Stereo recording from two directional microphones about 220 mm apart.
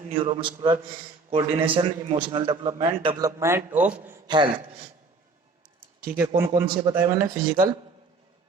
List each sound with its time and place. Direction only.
0.2 s a man's voice: 25° right (ahead or behind); by 4.2 s 5° right (ahead or behind)
4.3 s a man's voice: 20° right (ahead or behind)
6.1 s speech: 10° right (ahead or behind)